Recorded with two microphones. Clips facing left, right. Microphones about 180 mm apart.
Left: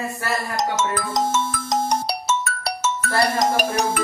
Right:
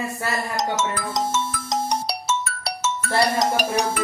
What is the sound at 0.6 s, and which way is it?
Ringtone, 50° left (ahead or behind).